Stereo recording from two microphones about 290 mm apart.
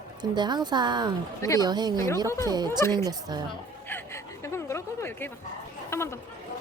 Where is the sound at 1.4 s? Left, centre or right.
Centre.